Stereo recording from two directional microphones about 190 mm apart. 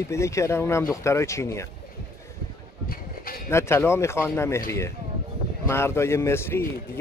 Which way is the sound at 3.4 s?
15° left (ahead or behind).